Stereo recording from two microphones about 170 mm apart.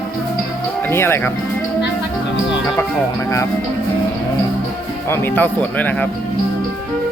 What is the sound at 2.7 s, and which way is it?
Speech, 15° left (ahead or behind).